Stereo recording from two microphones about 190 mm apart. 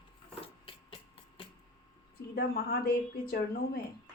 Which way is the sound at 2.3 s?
55° left (ahead or behind).